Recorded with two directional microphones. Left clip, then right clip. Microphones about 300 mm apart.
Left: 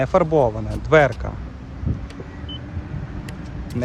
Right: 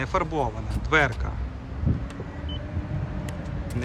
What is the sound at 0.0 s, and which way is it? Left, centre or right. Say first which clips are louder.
Speech: left 9 dB; centre.